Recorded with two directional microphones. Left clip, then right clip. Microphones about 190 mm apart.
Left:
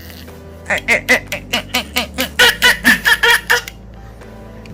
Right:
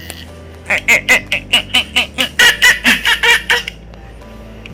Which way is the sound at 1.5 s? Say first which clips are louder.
Right 5 dB; 35° left (ahead or behind).